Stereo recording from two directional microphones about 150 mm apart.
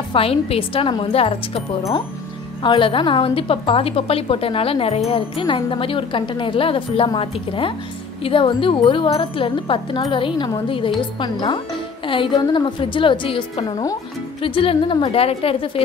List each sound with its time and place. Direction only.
0.1 s a woman's voice: 40° left (ahead or behind)
1.8 s speech: 20° left (ahead or behind)
2.6 s a woman's voice: 35° left (ahead or behind)